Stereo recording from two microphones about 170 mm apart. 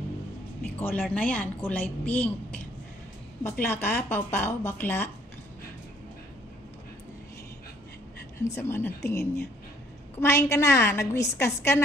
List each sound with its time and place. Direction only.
0.7 s a woman's voice: 10° left (ahead or behind)
8.4 s a woman's voice: 15° left (ahead or behind)